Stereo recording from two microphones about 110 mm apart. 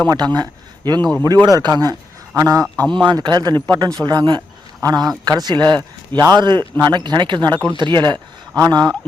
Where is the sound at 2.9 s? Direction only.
45° right (ahead or behind).